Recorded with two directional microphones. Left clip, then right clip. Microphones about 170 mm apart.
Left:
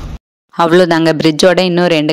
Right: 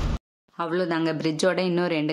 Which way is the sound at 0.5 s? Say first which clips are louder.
Left 16 dB; 60° left (ahead or behind).